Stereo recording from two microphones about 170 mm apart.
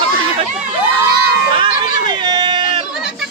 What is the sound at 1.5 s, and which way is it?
Speech, 30° right (ahead or behind).